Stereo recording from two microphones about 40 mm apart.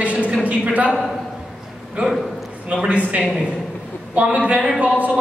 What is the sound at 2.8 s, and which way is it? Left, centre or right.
A woman's voice, right.